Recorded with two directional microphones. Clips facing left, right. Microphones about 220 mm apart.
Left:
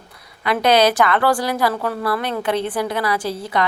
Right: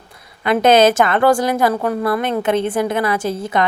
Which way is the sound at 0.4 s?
25° right (ahead or behind).